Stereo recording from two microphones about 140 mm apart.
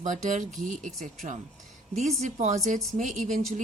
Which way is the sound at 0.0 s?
65° right (ahead or behind).